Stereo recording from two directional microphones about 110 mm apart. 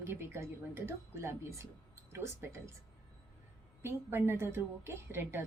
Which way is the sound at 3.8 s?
20° right (ahead or behind).